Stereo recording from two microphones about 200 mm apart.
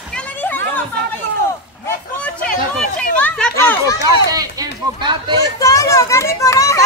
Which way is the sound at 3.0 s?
5° left (ahead or behind).